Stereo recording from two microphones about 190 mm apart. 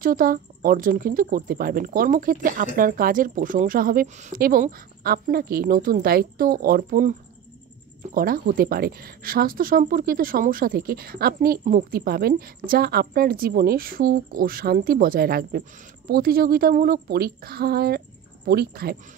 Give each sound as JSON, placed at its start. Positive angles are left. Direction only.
{"t": 0.0, "sound": "speech", "side_deg": -50}